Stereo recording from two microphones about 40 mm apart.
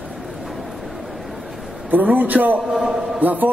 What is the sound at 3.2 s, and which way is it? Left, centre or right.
Speech, right.